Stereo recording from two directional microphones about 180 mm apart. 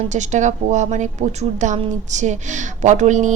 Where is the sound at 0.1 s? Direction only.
40° right (ahead or behind).